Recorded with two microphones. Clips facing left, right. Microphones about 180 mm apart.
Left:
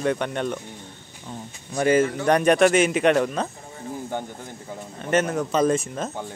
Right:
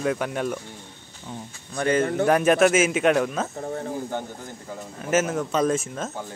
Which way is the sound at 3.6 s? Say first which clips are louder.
Right 10 dB; 60° right (ahead or behind).